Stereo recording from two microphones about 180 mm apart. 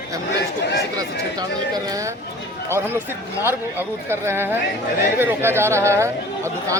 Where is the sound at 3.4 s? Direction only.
15° right (ahead or behind).